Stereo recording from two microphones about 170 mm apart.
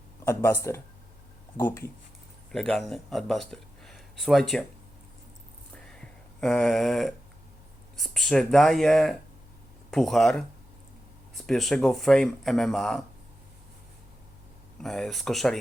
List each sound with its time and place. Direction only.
0.3 s speech: 15° left (ahead or behind)
2.5 s speech: centre (ahead or behind)
6.4 s speech: centre (ahead or behind)
14.8 s speech: centre (ahead or behind)